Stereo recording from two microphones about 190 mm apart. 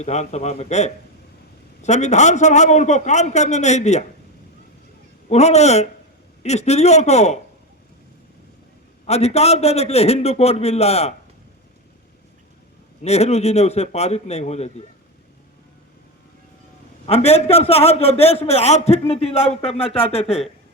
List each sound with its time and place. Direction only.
0.0 s a man's voice: 35° left (ahead or behind)
5.3 s a man's voice: 35° left (ahead or behind)
9.0 s a man's voice: 35° left (ahead or behind)
13.0 s a man's voice: 35° left (ahead or behind)
17.1 s a man's voice: 35° left (ahead or behind)